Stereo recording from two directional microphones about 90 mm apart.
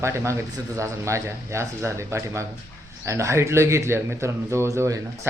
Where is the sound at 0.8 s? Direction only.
35° right (ahead or behind).